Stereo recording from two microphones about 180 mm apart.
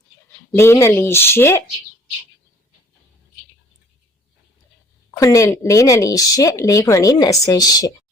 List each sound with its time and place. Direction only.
0.5 s speech: 15° left (ahead or behind)
5.2 s speech: 15° left (ahead or behind)